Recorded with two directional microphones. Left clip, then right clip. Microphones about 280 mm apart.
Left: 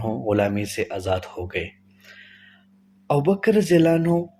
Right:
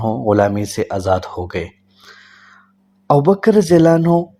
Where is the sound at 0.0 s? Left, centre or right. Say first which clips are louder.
Right 7 dB; centre.